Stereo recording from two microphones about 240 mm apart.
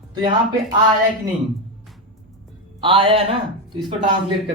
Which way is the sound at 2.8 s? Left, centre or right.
Right.